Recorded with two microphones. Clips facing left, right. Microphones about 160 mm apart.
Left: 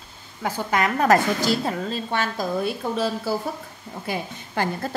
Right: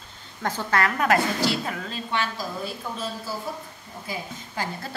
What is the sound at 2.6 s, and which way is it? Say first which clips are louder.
A woman's voice: left 8 dB; 70° left (ahead or behind).